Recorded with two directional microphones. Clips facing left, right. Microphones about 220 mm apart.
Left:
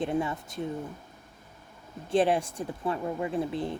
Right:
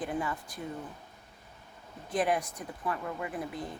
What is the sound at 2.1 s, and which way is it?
Speech, 30° left (ahead or behind).